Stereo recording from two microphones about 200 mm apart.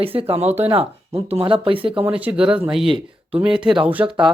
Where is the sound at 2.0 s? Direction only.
5° right (ahead or behind).